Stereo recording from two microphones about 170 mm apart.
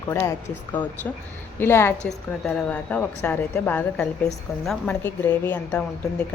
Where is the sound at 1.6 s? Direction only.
15° left (ahead or behind).